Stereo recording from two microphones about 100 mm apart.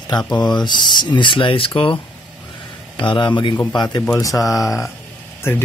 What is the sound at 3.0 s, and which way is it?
Speech, 55° left (ahead or behind).